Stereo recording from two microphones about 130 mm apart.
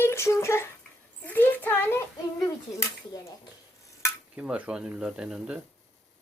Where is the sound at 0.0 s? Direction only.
20° left (ahead or behind).